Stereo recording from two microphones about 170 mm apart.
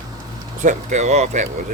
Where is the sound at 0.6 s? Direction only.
45° right (ahead or behind).